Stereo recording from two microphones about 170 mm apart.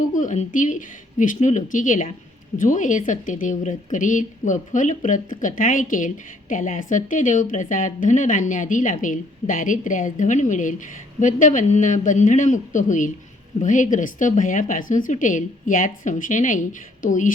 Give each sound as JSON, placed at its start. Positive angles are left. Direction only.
{"t": 0.0, "sound": "a woman's voice", "side_deg": 50}